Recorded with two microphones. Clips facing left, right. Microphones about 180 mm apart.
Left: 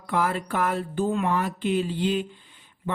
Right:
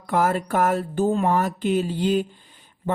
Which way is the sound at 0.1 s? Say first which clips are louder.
Right 4 dB; 45° right (ahead or behind).